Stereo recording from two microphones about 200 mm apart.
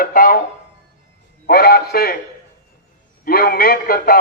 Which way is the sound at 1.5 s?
50° left (ahead or behind).